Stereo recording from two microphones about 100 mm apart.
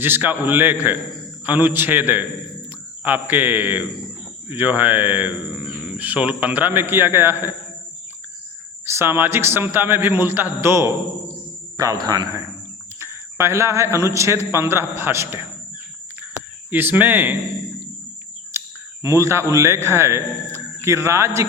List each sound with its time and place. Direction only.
0.0 s a man's voice: 20° right (ahead or behind)
8.9 s a man's voice: 25° right (ahead or behind)
11.8 s speech: 35° right (ahead or behind)
13.0 s a man's voice: 25° right (ahead or behind)
18.5 s a sound: 30° right (ahead or behind)
19.0 s a man's voice: 30° right (ahead or behind)